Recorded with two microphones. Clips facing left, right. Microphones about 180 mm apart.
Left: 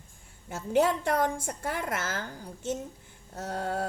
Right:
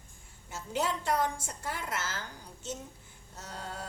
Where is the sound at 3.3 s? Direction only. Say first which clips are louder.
Left 10 dB; 55° left (ahead or behind).